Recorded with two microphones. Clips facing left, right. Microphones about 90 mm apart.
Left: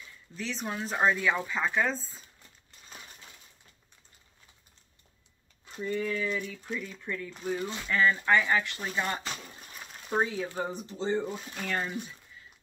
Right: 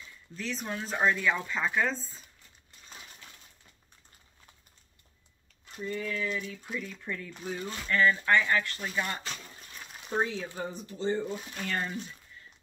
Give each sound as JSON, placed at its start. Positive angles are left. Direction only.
{"t": 0.4, "sound": "speech", "side_deg": 0}
{"t": 5.8, "sound": "speech", "side_deg": 20}
{"t": 6.4, "sound": "speech", "side_deg": -5}
{"t": 7.5, "sound": "speech", "side_deg": 15}
{"t": 11.5, "sound": "speech", "side_deg": 5}